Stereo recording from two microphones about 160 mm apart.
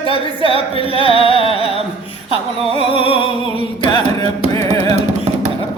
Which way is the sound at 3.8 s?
25° left (ahead or behind).